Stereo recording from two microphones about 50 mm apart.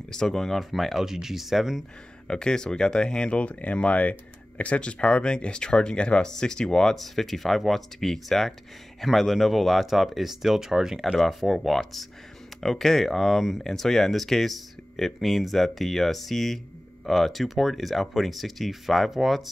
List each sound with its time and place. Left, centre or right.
0.1 s speech: centre
2.2 s speech: centre